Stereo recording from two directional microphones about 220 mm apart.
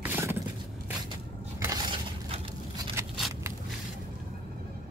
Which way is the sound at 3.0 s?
15° right (ahead or behind).